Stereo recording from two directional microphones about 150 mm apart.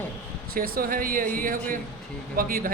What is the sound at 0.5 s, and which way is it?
Speech, 75° right (ahead or behind).